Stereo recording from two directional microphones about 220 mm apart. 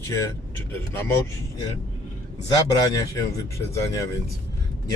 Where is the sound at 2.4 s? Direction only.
15° left (ahead or behind).